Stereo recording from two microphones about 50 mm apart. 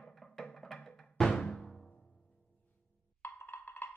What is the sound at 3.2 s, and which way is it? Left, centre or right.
Music, left.